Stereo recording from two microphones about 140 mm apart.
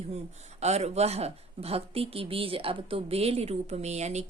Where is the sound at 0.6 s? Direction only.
50° right (ahead or behind).